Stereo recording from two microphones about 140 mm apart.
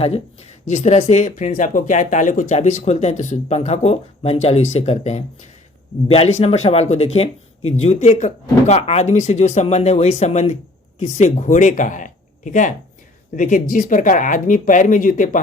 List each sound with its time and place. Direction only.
0.7 s speech: 55° left (ahead or behind); by 15.4 s 70° left (ahead or behind)